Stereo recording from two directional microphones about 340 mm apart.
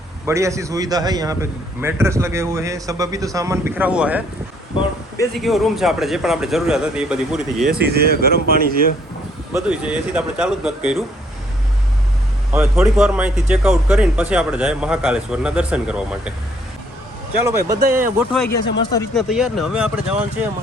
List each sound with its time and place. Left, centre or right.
0.3 s a man's voice: centre
4.8 s a man's voice: centre
7.7 s speech: right
9.5 s a man's voice: centre
12.5 s a man's voice: centre
17.4 s a man's voice: centre
18.5 s a man's voice: centre